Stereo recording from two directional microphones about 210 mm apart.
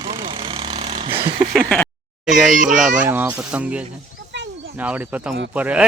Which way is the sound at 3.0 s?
10° right (ahead or behind).